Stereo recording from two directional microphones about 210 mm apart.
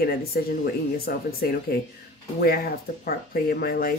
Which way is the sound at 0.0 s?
45° left (ahead or behind).